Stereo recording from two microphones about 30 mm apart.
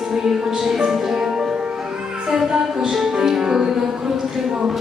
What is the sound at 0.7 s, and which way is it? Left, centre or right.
Music, centre.